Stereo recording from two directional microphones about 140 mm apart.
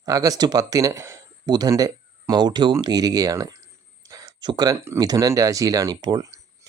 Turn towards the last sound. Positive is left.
turn(degrees=-25)  # may be behind; listen again after turning